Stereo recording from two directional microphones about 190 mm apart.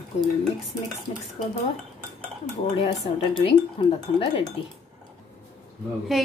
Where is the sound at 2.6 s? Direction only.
35° left (ahead or behind).